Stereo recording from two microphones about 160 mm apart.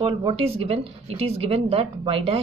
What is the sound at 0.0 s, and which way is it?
Speech, 35° right (ahead or behind).